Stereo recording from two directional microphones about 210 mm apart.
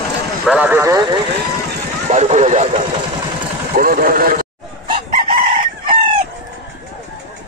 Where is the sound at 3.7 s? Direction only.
45° right (ahead or behind).